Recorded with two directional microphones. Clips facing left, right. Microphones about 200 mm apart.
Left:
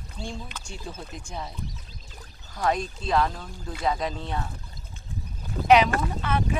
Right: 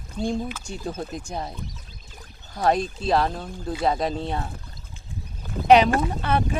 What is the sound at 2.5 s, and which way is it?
Speech, 35° right (ahead or behind).